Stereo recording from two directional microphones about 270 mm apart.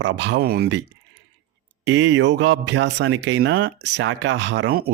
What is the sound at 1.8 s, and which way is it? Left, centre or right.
Speech, right.